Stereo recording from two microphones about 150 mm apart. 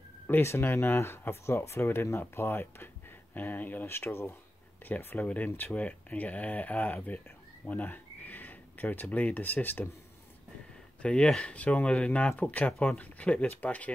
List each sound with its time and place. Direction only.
0.3 s speech: 15° left (ahead or behind)
11.0 s speech: 5° left (ahead or behind)